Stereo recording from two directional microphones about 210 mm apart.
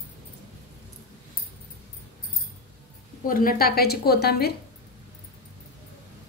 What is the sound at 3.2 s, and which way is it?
A woman's voice, 40° left (ahead or behind).